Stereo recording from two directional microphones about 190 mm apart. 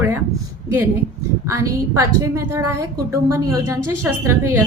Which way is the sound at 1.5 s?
15° right (ahead or behind).